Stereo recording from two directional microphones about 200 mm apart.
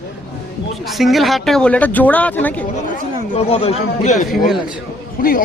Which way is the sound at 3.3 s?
30° left (ahead or behind).